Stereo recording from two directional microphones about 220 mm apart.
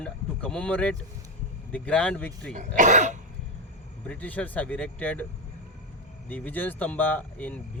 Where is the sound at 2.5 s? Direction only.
35° right (ahead or behind).